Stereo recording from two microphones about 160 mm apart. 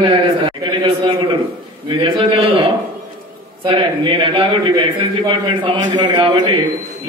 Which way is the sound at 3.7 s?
30° right (ahead or behind).